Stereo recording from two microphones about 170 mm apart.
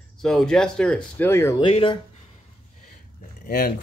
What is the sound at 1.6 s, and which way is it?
Speech, 30° left (ahead or behind).